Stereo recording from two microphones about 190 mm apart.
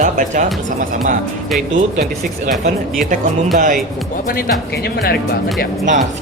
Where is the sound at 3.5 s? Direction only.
45° right (ahead or behind).